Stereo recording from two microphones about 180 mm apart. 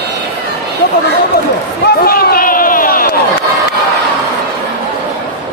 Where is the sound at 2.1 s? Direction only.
55° left (ahead or behind).